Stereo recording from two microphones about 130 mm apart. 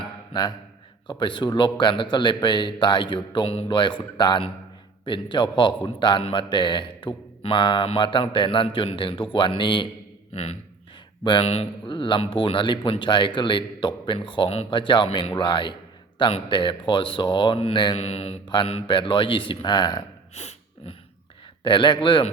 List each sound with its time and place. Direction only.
1.2 s a man's voice: 35° left (ahead or behind)
10.3 s speech: 55° left (ahead or behind)
11.2 s speech: 35° left (ahead or behind)
11.4 s a man's voice: 50° left (ahead or behind)
20.3 s a sound: 55° left (ahead or behind)
21.6 s a man's voice: 40° left (ahead or behind)